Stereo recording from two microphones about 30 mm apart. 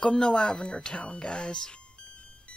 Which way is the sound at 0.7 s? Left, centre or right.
Left.